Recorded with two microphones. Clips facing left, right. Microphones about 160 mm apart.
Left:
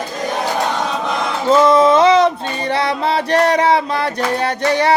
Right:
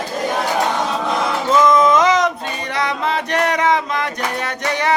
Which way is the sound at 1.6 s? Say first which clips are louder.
Left 2 dB; 30° left (ahead or behind).